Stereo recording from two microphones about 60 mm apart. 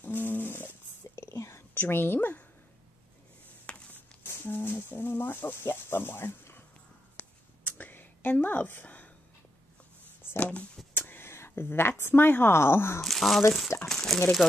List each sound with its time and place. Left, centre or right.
0.0 s dog: left
1.2 s whispering: left
1.7 s a woman's voice: left
3.6 s a sound: left
4.2 s speech: left
7.2 s whispering: left
10.3 s a sound: left
11.0 s speech: left
13.0 s speech: centre